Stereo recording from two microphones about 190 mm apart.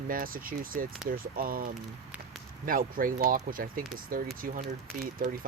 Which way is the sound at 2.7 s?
50° right (ahead or behind).